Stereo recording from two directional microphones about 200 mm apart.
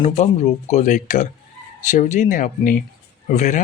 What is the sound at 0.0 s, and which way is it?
Speech, 35° left (ahead or behind).